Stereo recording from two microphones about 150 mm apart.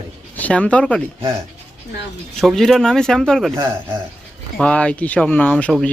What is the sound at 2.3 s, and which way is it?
Speech, centre (ahead or behind).